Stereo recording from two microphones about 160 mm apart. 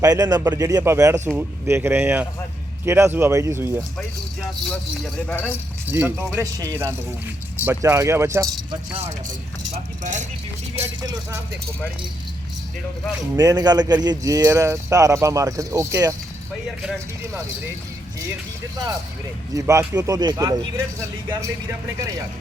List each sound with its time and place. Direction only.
0.0 s speech: 25° right (ahead or behind)
4.7 s speech: 5° left (ahead or behind)
5.9 s speech: 15° right (ahead or behind)
10.0 s speech: 50° right (ahead or behind)
11.0 s speech: 20° right (ahead or behind)
13.3 s speech: 25° right (ahead or behind)
19.5 s speech: 20° right (ahead or behind)